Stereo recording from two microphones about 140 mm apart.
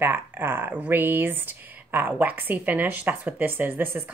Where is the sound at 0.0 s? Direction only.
15° right (ahead or behind).